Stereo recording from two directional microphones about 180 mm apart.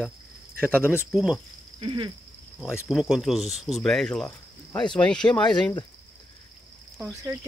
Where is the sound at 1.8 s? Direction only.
30° right (ahead or behind).